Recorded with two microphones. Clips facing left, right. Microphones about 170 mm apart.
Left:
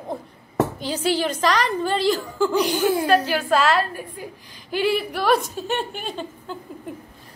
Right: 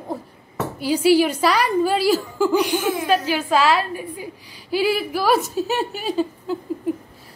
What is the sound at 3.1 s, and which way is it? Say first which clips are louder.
A woman's voice: even; 10° right (ahead or behind).